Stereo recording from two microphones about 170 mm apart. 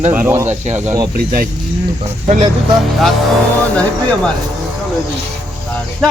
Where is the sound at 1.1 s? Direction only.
60° right (ahead or behind).